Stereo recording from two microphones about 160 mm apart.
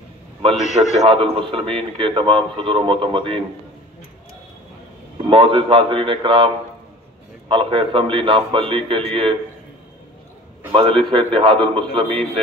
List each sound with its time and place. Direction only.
0.6 s a man's voice: 50° left (ahead or behind)
1.0 s a man's voice: 35° right (ahead or behind)
5.3 s a man's voice: 30° right (ahead or behind)
10.7 s a man's voice: 30° right (ahead or behind)